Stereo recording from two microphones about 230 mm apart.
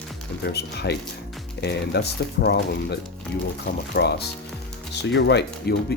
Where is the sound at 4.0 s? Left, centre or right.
Left.